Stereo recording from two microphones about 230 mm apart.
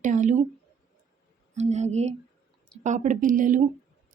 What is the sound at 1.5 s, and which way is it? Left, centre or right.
A woman's voice, right.